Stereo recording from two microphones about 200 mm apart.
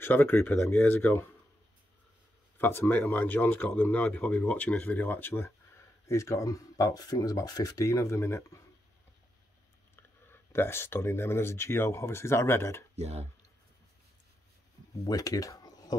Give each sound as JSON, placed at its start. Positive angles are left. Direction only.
{"t": 0.0, "sound": "speech", "side_deg": 10}
{"t": 2.5, "sound": "speech", "side_deg": 10}
{"t": 9.9, "sound": "speech", "side_deg": 10}
{"t": 12.9, "sound": "speech", "side_deg": -30}
{"t": 15.0, "sound": "speech", "side_deg": 20}